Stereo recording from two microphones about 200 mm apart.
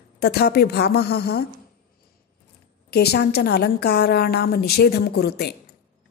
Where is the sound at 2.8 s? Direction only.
55° left (ahead or behind).